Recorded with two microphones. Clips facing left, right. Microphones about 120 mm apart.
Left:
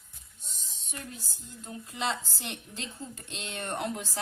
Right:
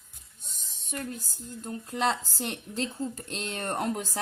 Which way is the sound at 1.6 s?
45° right (ahead or behind).